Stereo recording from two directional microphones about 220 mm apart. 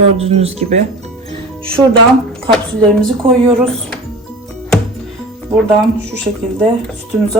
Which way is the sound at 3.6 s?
5° left (ahead or behind).